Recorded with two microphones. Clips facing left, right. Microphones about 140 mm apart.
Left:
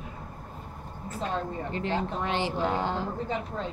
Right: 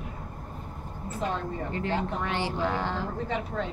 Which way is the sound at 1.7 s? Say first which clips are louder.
Even; 20° left (ahead or behind).